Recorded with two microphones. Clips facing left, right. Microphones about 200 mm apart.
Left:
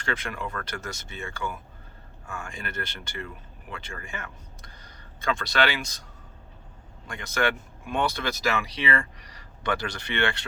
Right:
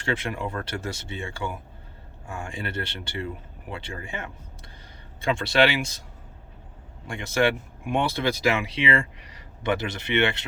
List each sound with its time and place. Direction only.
0.0 s speech: 25° right (ahead or behind)
7.1 s speech: 25° right (ahead or behind)